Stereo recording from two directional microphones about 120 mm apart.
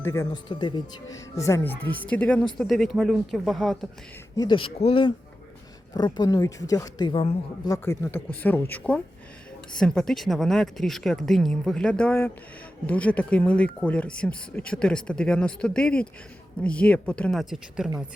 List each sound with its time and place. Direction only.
0.0 s speech: 25° left (ahead or behind); by 3.8 s centre (ahead or behind)
4.4 s speech: 45° left (ahead or behind)
5.9 s speech: 35° left (ahead or behind)
7.1 s speech: 50° left (ahead or behind)
7.6 s speech: 25° left (ahead or behind); by 17.4 s 10° left (ahead or behind)
17.4 s speech: 5° right (ahead or behind)